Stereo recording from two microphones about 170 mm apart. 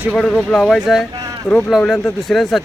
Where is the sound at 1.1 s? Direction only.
20° right (ahead or behind).